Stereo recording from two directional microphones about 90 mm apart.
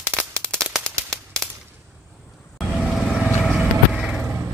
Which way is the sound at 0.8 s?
5° left (ahead or behind).